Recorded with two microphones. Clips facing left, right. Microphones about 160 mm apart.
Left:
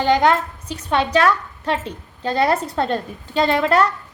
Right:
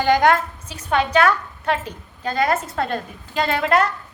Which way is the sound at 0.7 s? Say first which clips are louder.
Left 1 dB; 35° left (ahead or behind).